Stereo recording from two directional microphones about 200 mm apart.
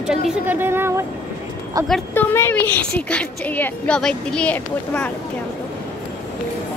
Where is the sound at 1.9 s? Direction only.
10° left (ahead or behind).